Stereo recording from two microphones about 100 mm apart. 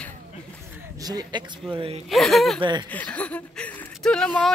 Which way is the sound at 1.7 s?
70° right (ahead or behind).